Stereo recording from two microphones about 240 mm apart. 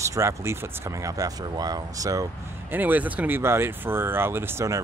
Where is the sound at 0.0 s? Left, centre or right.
Centre.